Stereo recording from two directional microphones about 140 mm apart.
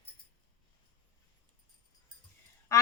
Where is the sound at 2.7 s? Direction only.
20° left (ahead or behind).